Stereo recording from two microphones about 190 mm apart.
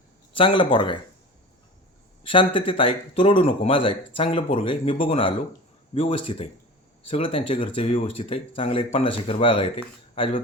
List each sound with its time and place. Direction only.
0.3 s speech: 25° left (ahead or behind)
2.2 s speech: 25° left (ahead or behind)